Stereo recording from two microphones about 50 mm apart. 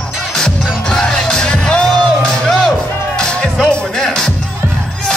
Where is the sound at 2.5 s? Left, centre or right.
Centre.